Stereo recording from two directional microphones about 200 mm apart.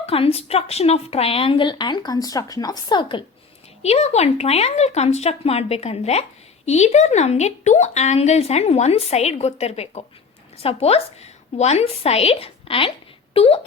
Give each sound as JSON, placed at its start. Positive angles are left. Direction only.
{"t": 0.0, "sound": "a woman's voice", "side_deg": 30}